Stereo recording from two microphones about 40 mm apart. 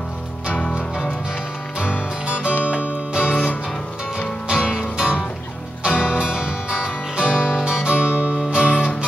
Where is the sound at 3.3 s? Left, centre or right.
Left.